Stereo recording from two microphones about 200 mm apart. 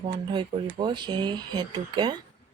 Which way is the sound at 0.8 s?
20° right (ahead or behind).